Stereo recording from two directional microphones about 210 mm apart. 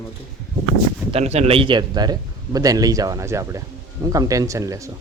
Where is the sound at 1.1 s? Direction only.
30° right (ahead or behind); by 4.8 s 15° right (ahead or behind).